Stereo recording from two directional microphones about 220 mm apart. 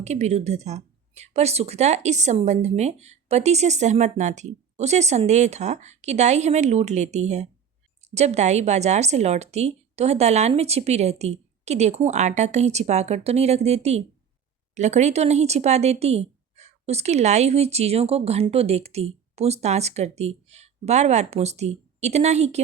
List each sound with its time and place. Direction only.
0.0 s speech: 30° right (ahead or behind)